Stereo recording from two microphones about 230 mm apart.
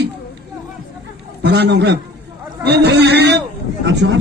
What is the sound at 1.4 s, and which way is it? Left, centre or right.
A man's voice, right.